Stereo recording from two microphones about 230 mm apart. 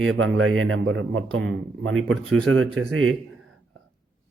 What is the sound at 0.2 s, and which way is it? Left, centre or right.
A man's voice, right.